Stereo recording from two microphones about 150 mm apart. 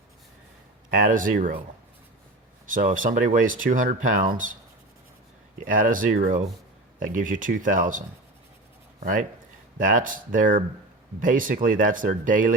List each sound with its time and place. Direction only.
0.9 s speech: 65° right (ahead or behind)
2.6 s speech: 65° right (ahead or behind)
5.6 s speech: 60° right (ahead or behind)